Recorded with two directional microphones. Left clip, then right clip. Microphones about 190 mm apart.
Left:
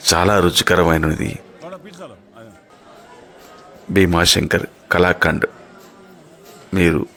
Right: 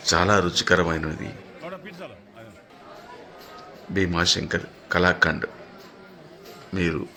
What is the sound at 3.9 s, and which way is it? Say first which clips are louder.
Speech: left 8 dB; 50° left (ahead or behind).